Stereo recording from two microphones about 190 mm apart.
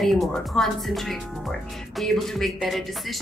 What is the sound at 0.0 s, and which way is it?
A woman's voice, centre (ahead or behind).